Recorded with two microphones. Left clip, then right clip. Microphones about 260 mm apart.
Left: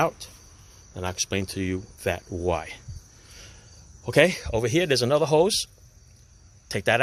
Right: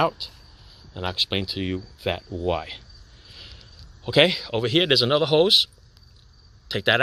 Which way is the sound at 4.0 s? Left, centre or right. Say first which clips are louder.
Right 1 dB; centre.